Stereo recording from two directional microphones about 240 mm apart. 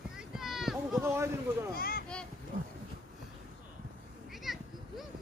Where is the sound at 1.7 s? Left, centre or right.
Left.